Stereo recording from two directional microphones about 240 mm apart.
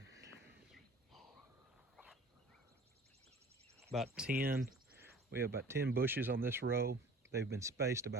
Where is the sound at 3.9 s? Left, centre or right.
Centre.